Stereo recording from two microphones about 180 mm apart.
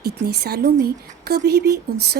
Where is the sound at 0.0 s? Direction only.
65° right (ahead or behind).